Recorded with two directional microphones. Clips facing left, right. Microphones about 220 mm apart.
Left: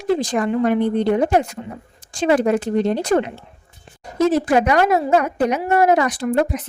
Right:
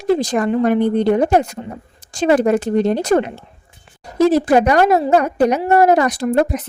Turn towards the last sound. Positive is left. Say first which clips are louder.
# right 3 dB
turn(degrees=-40)  # may be behind; listen again after turning